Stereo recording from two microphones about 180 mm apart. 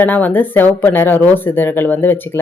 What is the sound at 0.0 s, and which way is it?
Speech, 10° left (ahead or behind).